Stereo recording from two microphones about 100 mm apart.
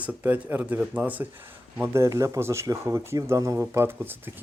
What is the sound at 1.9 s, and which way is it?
Speech, 30° right (ahead or behind).